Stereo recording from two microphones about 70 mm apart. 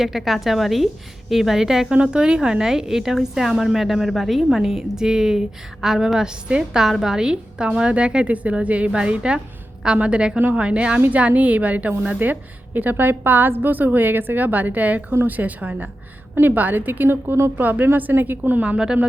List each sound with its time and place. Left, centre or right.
0.0 s a woman's voice: centre; by 17.5 s right
17.6 s a woman's voice: right